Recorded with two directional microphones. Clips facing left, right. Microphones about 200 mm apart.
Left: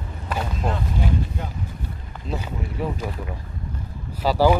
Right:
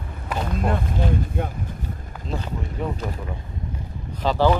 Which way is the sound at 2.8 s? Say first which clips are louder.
Left 1 dB; 5° left (ahead or behind).